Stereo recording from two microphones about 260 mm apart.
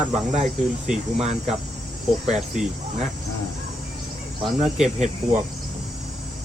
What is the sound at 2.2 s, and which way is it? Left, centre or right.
Speech, centre.